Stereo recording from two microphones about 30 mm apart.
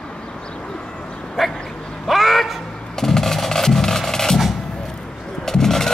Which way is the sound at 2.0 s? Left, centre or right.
Centre.